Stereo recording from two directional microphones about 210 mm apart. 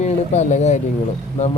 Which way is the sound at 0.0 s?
35° left (ahead or behind).